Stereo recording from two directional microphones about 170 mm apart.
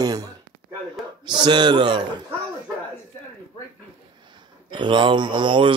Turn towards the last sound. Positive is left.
turn(degrees=-30)  # may be behind; listen again after turning